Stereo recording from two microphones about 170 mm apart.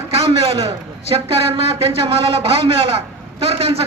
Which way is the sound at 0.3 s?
35° right (ahead or behind).